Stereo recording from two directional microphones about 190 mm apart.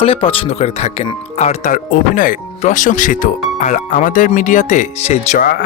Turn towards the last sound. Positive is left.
turn(degrees=45)  # may be behind; listen again after turning